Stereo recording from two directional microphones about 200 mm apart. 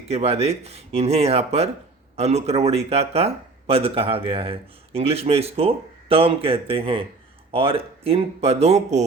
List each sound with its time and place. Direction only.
0.1 s speech: 30° right (ahead or behind)